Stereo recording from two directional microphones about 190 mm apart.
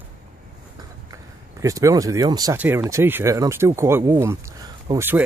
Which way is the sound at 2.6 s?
10° right (ahead or behind).